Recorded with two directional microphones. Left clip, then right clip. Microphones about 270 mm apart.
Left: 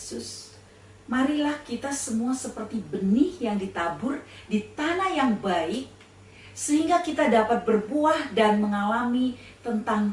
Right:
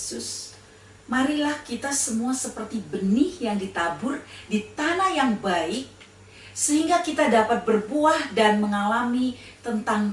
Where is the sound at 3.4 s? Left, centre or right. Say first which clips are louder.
Right 2 dB; centre.